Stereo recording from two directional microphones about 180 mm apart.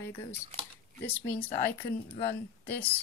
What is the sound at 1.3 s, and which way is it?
Speech, 30° left (ahead or behind).